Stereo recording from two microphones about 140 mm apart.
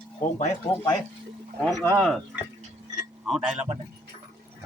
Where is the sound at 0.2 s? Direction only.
55° left (ahead or behind).